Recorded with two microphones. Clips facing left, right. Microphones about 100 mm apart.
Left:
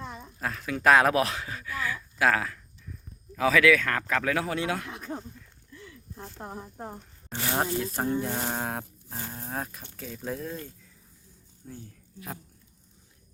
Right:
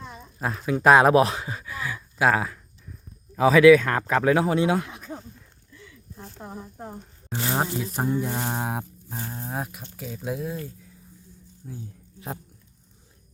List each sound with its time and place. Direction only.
0.3 s speech: 20° right (ahead or behind)
4.9 s speech: centre (ahead or behind)
5.8 s a sound: 10° left (ahead or behind)
6.4 s speech: 10° left (ahead or behind)
7.3 s speech: 20° right (ahead or behind)
11.6 s speech: 5° right (ahead or behind)